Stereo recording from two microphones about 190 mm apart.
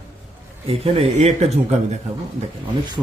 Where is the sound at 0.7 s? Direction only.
30° right (ahead or behind).